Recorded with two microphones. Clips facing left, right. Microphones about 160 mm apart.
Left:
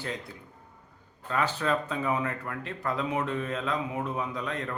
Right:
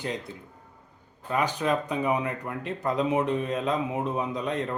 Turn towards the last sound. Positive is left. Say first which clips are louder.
# right 4 dB
turn(degrees=-20)  # may be behind; listen again after turning